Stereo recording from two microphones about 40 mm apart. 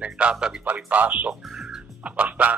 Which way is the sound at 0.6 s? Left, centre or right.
Right.